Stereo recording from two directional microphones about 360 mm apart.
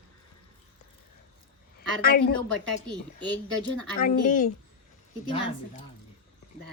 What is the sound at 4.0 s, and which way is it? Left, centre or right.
Speech, left.